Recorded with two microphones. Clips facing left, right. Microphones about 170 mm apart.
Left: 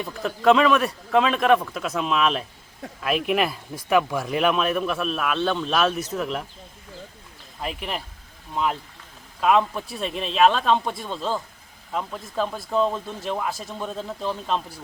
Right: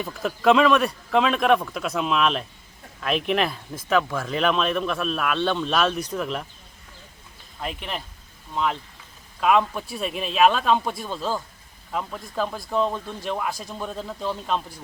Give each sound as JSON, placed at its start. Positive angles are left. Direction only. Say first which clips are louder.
{"t": 0.0, "sound": "speech", "louder": "left 1 dB", "side_deg": 0}
{"t": 7.6, "sound": "speech", "louder": "left 1 dB", "side_deg": 0}